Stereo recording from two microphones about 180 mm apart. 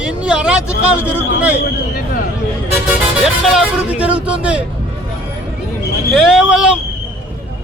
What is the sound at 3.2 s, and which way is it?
Speech, 5° right (ahead or behind).